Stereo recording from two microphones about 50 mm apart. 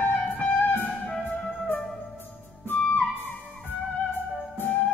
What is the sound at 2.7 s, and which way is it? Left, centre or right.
Music, left.